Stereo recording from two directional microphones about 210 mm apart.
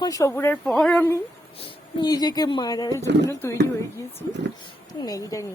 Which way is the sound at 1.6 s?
25° left (ahead or behind).